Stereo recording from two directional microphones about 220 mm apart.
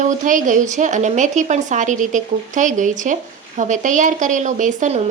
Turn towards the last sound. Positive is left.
turn(degrees=-35)  # may be behind; listen again after turning